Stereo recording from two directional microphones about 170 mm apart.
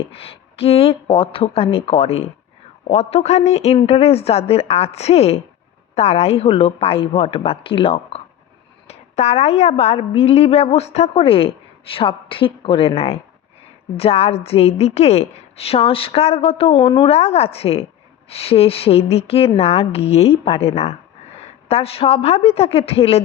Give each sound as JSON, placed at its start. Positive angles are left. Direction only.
{"t": 0.1, "sound": "a woman's voice", "side_deg": 35}